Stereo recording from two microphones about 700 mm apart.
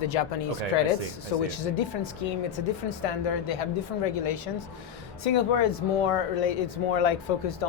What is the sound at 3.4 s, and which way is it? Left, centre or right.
Speech, left.